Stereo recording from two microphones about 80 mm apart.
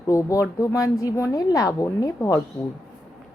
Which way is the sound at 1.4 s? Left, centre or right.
Left.